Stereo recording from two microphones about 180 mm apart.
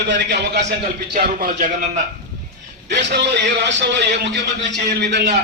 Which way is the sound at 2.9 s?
70° right (ahead or behind).